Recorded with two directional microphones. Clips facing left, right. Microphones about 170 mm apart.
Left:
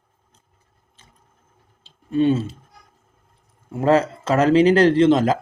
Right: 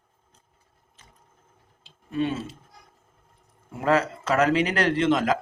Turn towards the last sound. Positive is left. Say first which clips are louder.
# left 7 dB
turn(degrees=30)  # may be behind; listen again after turning